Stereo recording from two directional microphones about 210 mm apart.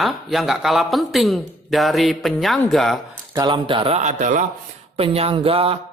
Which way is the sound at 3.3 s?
20° right (ahead or behind).